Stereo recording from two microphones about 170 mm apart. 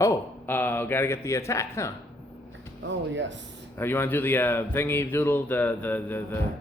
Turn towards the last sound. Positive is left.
turn(degrees=10)  # may be behind; listen again after turning